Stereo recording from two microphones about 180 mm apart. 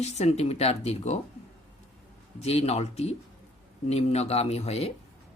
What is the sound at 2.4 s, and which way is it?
Speech, 35° left (ahead or behind).